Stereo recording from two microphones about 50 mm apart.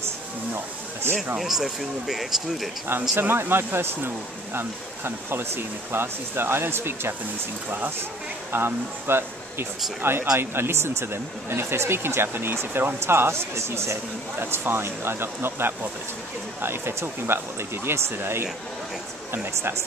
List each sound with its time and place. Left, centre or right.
1.4 s speech: centre
2.9 s speech: right
8.5 s speech: right
14.4 s speech: right